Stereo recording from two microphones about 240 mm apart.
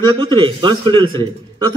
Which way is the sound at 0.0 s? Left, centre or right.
Centre.